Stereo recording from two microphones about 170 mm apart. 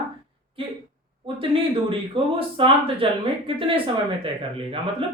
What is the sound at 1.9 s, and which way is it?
Speech, 30° right (ahead or behind).